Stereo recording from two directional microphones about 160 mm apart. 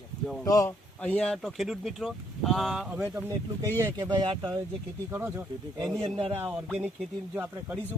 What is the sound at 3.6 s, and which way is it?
Speech, 15° right (ahead or behind).